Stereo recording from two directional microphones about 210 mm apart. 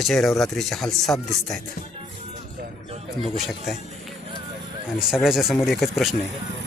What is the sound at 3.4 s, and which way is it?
Speech, centre (ahead or behind).